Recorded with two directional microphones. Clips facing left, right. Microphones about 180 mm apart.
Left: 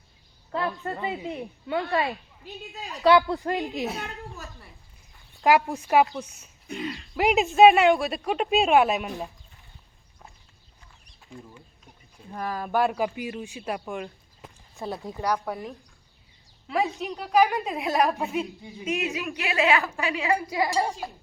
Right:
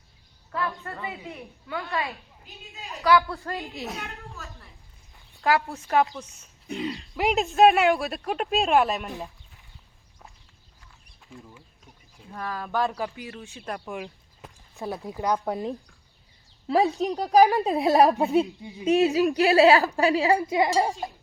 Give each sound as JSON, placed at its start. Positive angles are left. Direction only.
{"t": 0.5, "sound": "a woman's voice", "side_deg": 25}
{"t": 1.8, "sound": "a woman's voice", "side_deg": 35}
{"t": 3.0, "sound": "speech", "side_deg": 25}
{"t": 3.9, "sound": "a woman's voice", "side_deg": 35}
{"t": 5.4, "sound": "speech", "side_deg": 15}
{"t": 7.2, "sound": "speech", "side_deg": 0}
{"t": 11.3, "sound": "speech", "side_deg": 0}
{"t": 12.3, "sound": "speech", "side_deg": 15}
{"t": 13.7, "sound": "speech", "side_deg": 0}
{"t": 14.8, "sound": "a woman's voice", "side_deg": -15}
{"t": 16.6, "sound": "a woman's voice", "side_deg": -35}
{"t": 20.3, "sound": "a woman's voice", "side_deg": -20}